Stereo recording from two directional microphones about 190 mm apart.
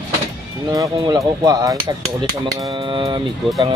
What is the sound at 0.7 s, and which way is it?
Speech, 15° right (ahead or behind).